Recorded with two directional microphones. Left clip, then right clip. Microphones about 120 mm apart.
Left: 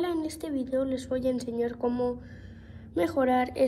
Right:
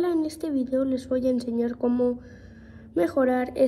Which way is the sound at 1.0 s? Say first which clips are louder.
Right 4 dB; 35° right (ahead or behind).